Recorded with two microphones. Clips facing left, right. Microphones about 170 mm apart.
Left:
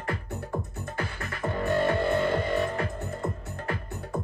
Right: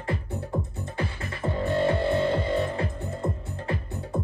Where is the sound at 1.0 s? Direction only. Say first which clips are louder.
Right 2 dB; 25° right (ahead or behind).